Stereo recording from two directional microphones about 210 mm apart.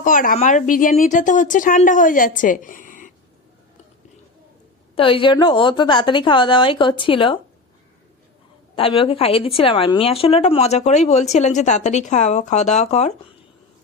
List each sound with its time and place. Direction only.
0.0 s a woman's voice: 40° left (ahead or behind)
4.9 s a woman's voice: 25° left (ahead or behind)
8.7 s a woman's voice: 25° left (ahead or behind)